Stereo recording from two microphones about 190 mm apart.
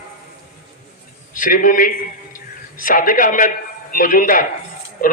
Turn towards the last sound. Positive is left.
turn(degrees=45)  # may be behind; listen again after turning